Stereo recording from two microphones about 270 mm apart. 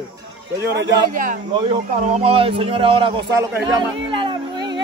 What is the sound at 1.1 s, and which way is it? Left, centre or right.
A man's voice, right.